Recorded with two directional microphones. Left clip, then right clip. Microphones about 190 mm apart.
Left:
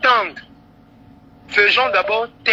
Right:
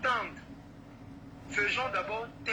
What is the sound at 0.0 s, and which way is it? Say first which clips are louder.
Vehicle: left 16 dB; 50° left (ahead or behind).